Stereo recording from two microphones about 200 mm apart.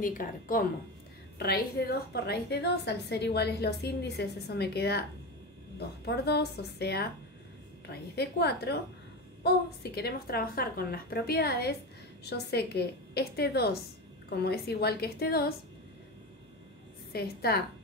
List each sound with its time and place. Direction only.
0.0 s a woman's voice: 45° left (ahead or behind)
17.1 s a woman's voice: 50° left (ahead or behind)